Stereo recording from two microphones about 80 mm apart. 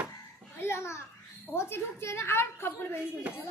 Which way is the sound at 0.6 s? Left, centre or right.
Left.